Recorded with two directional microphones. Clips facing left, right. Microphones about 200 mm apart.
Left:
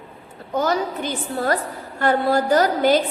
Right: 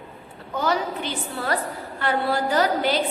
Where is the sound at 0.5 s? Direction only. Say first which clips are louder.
Left 3 dB; 45° left (ahead or behind).